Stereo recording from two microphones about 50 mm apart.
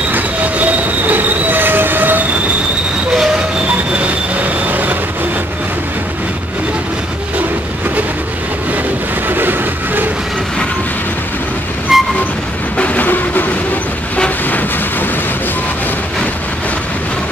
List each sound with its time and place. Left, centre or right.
0.1 s train: right
4.6 s vehicle: right
9.3 s a sound: right
11.9 s vehicle: centre
12.7 s train: left